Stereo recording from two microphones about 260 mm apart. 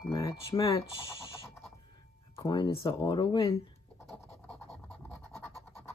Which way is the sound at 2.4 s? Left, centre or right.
Centre.